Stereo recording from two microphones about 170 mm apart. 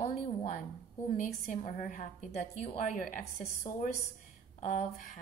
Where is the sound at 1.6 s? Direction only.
50° left (ahead or behind).